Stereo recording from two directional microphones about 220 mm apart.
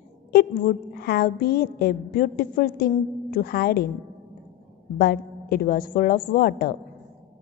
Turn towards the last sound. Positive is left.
turn(degrees=45)  # may be behind; listen again after turning